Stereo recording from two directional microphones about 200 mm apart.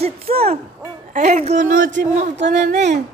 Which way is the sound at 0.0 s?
30° right (ahead or behind).